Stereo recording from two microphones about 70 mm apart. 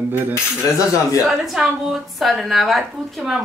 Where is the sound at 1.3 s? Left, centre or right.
Centre.